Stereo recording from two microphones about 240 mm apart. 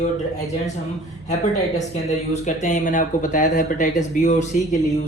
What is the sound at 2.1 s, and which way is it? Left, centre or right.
Speech, left.